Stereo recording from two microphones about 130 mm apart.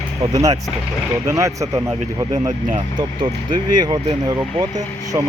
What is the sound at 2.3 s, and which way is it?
Speech, 70° right (ahead or behind).